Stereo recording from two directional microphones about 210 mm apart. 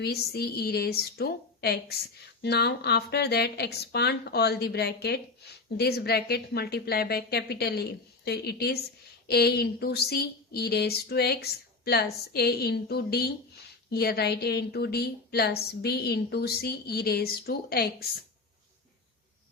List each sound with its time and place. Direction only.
0.0 s a woman's voice: 50° left (ahead or behind)